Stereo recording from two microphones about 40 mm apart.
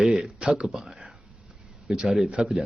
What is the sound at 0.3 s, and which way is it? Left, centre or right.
Speech, right.